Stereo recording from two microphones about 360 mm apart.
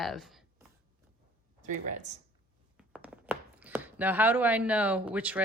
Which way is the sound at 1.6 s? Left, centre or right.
Centre.